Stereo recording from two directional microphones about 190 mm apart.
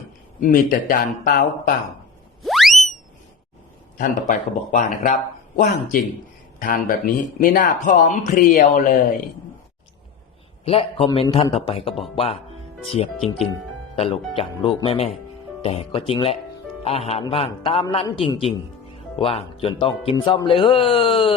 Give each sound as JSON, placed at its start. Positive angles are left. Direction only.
{"t": 0.3, "sound": "speech", "side_deg": 45}
{"t": 2.4, "sound": "a sound", "side_deg": 0}
{"t": 3.9, "sound": "speech", "side_deg": 45}
{"t": 10.7, "sound": "mantra", "side_deg": 30}
{"t": 17.9, "sound": "speech", "side_deg": 30}